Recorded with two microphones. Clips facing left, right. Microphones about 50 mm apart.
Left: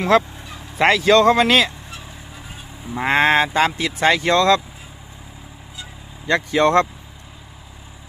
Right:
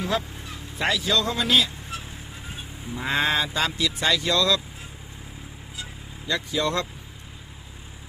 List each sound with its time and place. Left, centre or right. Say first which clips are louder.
0.0 s speech: left 11 dB; left
2.9 s speech: left 8 dB; left
6.2 s speech: left 9 dB; left